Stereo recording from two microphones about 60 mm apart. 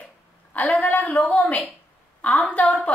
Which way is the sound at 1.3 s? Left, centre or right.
Left.